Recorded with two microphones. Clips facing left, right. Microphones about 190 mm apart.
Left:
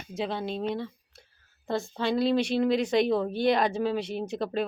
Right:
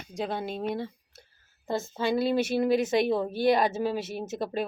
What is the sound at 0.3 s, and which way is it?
Speech, 50° right (ahead or behind).